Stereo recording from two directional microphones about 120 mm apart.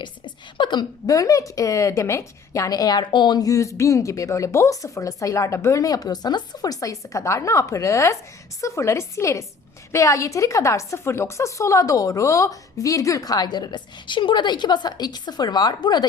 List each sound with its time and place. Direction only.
0.0 s speech: 40° left (ahead or behind)